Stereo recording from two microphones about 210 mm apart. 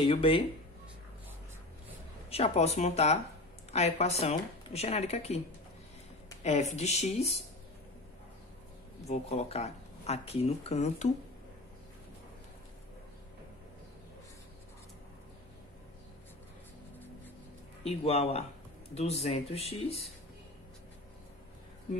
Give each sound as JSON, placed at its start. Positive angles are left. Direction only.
{"t": 0.0, "sound": "speech", "side_deg": 25}
{"t": 2.2, "sound": "speech", "side_deg": 30}
{"t": 6.4, "sound": "speech", "side_deg": 35}
{"t": 9.0, "sound": "speech", "side_deg": 30}
{"t": 17.8, "sound": "speech", "side_deg": 30}